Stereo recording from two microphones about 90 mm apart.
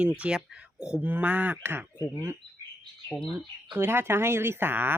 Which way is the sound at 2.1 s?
30° right (ahead or behind).